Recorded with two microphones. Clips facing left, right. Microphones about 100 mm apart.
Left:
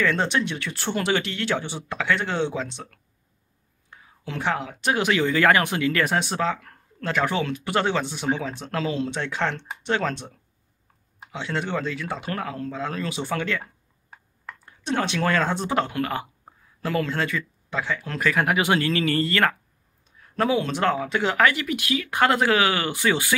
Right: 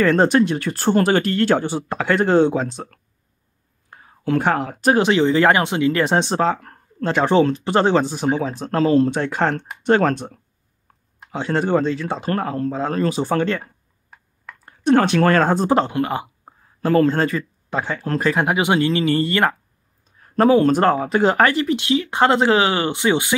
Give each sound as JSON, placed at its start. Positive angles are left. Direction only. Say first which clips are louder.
{"t": 0.0, "sound": "speech", "louder": "right 8 dB", "side_deg": -45}
{"t": 11.3, "sound": "speech", "louder": "right 9 dB", "side_deg": -40}
{"t": 14.6, "sound": "speech", "louder": "right 10 dB", "side_deg": -55}
{"t": 16.8, "sound": "speech", "louder": "right 9 dB", "side_deg": -40}
{"t": 20.1, "sound": "speech", "louder": "right 8 dB", "side_deg": -40}